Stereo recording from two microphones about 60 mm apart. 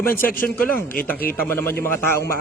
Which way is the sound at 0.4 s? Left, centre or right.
Left.